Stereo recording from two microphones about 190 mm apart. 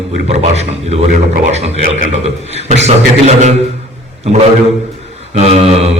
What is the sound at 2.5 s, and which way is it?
A man's voice, 35° right (ahead or behind).